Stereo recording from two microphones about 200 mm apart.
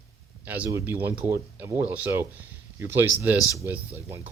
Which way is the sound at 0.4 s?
10° right (ahead or behind).